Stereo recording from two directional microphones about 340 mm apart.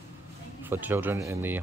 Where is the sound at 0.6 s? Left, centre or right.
Centre.